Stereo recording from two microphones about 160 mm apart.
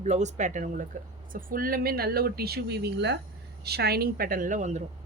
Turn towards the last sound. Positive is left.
turn(degrees=-50)  # may be behind; listen again after turning